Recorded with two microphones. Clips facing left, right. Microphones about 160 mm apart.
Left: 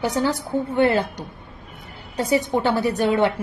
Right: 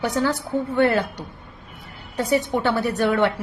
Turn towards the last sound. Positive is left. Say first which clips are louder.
# left 1 dB
turn(degrees=15)  # may be behind; listen again after turning